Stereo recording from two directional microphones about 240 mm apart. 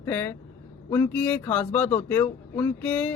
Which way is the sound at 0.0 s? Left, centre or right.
Centre.